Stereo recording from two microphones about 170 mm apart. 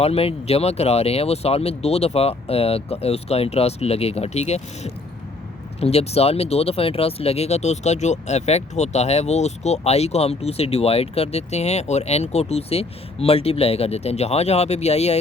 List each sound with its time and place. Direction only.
0.0 s speech: 35° left (ahead or behind)